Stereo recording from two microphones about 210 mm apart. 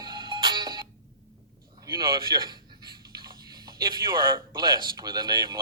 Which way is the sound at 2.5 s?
20° right (ahead or behind).